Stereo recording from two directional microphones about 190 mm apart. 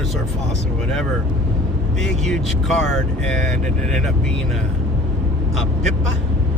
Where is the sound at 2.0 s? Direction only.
5° left (ahead or behind).